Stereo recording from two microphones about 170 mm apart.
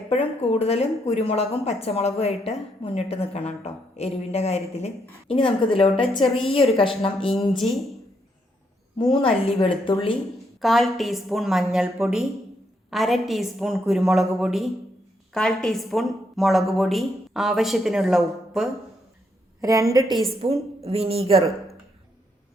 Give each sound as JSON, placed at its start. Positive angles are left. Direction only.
{"t": 0.1, "sound": "speech", "side_deg": 35}
{"t": 7.5, "sound": "a woman's voice", "side_deg": 0}
{"t": 9.6, "sound": "speech", "side_deg": 30}
{"t": 10.6, "sound": "a woman's voice", "side_deg": 0}
{"t": 19.9, "sound": "a woman's voice", "side_deg": -25}
{"t": 20.4, "sound": "a woman's voice", "side_deg": -35}